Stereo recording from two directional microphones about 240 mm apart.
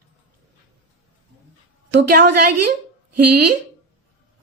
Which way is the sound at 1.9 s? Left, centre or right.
Right.